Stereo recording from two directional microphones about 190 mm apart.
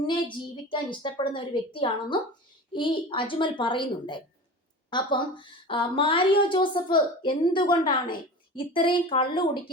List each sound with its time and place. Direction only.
0.1 s a woman's voice: 25° left (ahead or behind)